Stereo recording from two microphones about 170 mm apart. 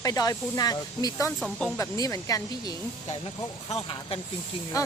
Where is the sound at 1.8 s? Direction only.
20° left (ahead or behind).